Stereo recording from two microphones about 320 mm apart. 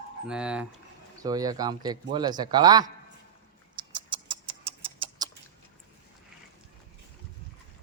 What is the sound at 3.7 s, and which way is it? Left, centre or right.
Typing, centre.